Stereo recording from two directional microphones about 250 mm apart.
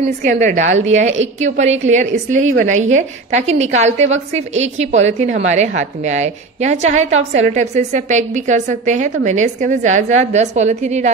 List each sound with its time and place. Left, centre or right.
0.0 s a woman's voice: right